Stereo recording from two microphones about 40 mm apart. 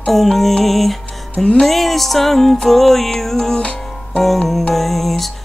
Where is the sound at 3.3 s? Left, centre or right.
Centre.